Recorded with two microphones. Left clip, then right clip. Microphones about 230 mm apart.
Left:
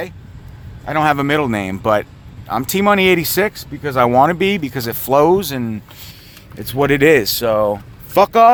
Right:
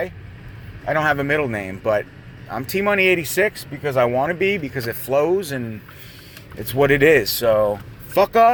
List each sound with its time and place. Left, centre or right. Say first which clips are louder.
0.9 s a man's voice: left 3 dB; left